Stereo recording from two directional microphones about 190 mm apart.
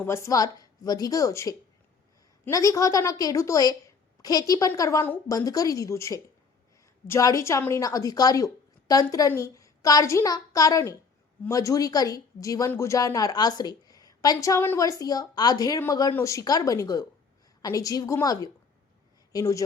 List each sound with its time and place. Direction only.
0.0 s a woman's voice: 15° left (ahead or behind)